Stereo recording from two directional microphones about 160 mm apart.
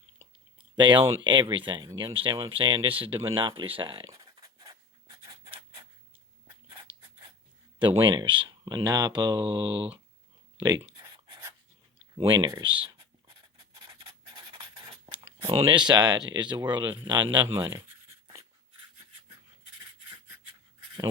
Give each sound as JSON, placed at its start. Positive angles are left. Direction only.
{"t": 0.8, "sound": "speech", "side_deg": -30}
{"t": 5.5, "sound": "a sound", "side_deg": -30}
{"t": 7.8, "sound": "speech", "side_deg": -30}
{"t": 10.8, "sound": "writing", "side_deg": -25}
{"t": 12.1, "sound": "speech", "side_deg": -25}
{"t": 13.7, "sound": "writing", "side_deg": -30}
{"t": 15.4, "sound": "speech", "side_deg": -35}